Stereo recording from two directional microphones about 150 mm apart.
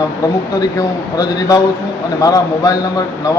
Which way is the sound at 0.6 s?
25° left (ahead or behind).